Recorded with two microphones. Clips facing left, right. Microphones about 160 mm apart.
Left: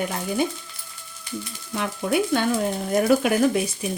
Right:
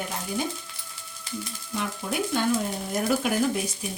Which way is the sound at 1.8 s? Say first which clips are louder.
Left 6 dB; 70° left (ahead or behind).